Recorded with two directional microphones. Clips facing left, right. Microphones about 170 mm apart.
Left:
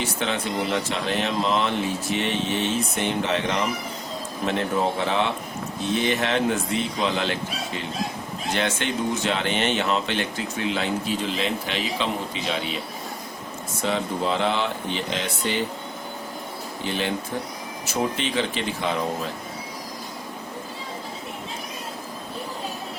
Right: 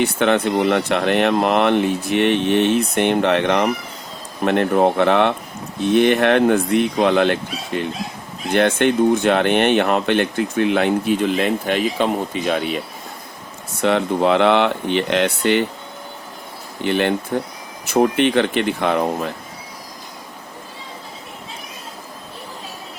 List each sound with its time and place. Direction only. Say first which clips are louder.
0.0 s speech: right 10 dB; 60° right (ahead or behind)
13.8 s speech: right 8 dB; 65° right (ahead or behind)
16.8 s speech: right 9 dB; 60° right (ahead or behind)